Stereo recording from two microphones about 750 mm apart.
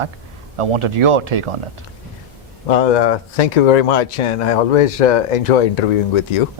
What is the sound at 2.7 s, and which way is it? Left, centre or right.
Speech, left.